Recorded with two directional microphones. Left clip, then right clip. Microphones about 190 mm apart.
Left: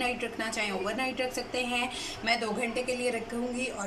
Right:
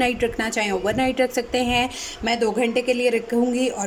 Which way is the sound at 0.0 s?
40° right (ahead or behind).